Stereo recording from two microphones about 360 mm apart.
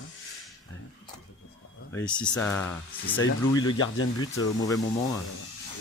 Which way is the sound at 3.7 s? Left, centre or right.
Left.